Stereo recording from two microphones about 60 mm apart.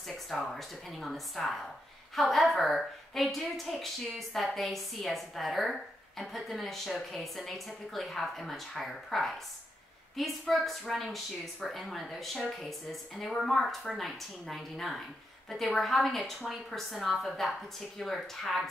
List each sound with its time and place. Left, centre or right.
0.3 s a woman's voice: centre